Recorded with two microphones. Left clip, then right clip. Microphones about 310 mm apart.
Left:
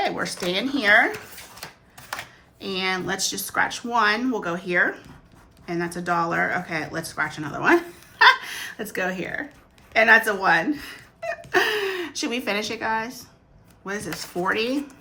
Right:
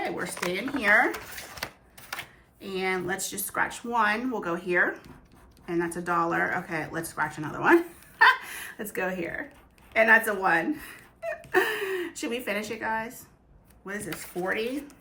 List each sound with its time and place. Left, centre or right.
0.0 s speech: centre
2.6 s speech: centre
14.3 s speech: centre